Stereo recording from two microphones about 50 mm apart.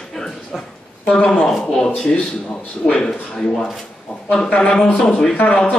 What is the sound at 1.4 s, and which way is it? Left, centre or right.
Speech, centre.